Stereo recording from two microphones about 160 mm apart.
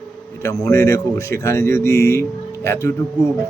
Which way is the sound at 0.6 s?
20° left (ahead or behind).